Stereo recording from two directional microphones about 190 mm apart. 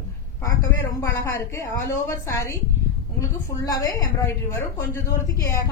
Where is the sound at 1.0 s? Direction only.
15° left (ahead or behind).